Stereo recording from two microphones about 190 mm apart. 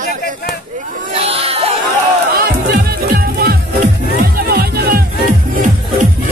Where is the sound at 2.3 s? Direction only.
55° right (ahead or behind).